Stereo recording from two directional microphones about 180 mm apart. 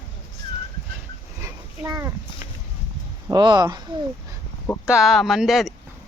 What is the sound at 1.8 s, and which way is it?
Speech, 15° right (ahead or behind).